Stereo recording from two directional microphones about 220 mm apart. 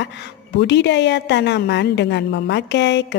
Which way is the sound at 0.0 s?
50° left (ahead or behind).